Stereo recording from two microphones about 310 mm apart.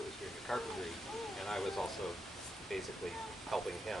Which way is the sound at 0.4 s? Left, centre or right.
Centre.